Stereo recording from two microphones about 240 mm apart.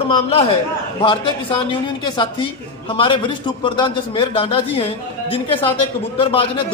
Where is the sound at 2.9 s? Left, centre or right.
Left.